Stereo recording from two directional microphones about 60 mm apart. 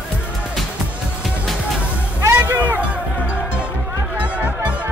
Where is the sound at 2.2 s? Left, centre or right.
Right.